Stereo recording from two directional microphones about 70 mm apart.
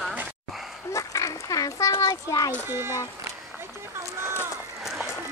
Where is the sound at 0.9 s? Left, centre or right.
Left.